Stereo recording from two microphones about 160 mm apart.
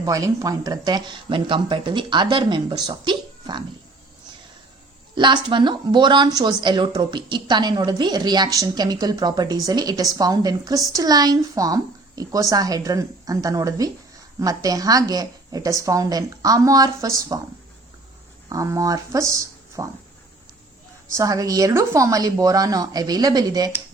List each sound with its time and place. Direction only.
0.0 s speech: 20° right (ahead or behind)
5.1 s speech: 30° right (ahead or behind)
18.4 s speech: 20° right (ahead or behind)
21.2 s speech: 20° right (ahead or behind)